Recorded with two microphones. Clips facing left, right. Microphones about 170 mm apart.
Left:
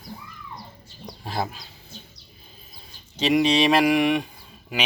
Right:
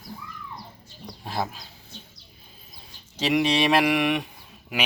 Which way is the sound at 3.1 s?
5° right (ahead or behind).